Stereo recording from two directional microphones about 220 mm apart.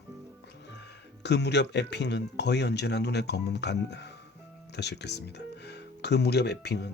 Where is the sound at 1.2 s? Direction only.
50° left (ahead or behind).